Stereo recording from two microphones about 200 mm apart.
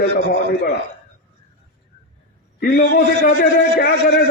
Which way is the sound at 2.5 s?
50° left (ahead or behind).